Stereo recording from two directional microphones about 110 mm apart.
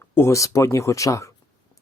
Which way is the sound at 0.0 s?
25° left (ahead or behind).